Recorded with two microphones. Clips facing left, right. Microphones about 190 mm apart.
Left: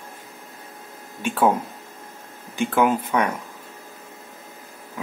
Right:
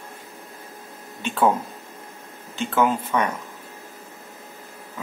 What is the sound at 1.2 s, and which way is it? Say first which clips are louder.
Speech: left 1 dB; 10° left (ahead or behind).